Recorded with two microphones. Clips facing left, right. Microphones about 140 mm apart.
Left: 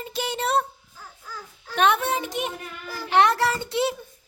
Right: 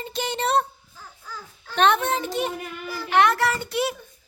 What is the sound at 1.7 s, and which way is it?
Speech, 10° left (ahead or behind).